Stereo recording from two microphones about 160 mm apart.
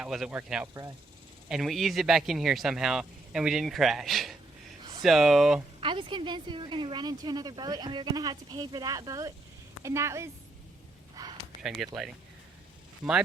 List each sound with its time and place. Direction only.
0.0 s speech: 5° right (ahead or behind)
5.8 s a woman's voice: 30° right (ahead or behind)
11.1 s a sound: 25° right (ahead or behind)
11.6 s speech: centre (ahead or behind)